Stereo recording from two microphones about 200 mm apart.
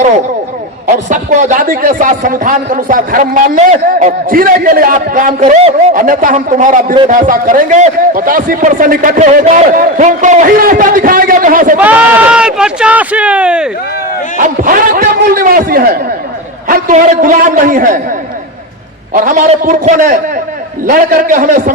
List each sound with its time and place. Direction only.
0.9 s a man's voice: 35° right (ahead or behind)
11.8 s speech: 5° right (ahead or behind)
14.3 s a man's voice: 40° right (ahead or behind)
19.1 s a man's voice: 40° right (ahead or behind)